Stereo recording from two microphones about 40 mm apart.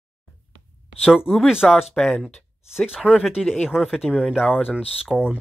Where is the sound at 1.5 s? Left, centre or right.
Centre.